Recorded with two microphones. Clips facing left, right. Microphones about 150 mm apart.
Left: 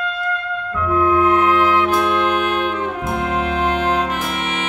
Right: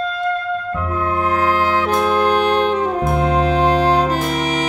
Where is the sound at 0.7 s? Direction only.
35° right (ahead or behind).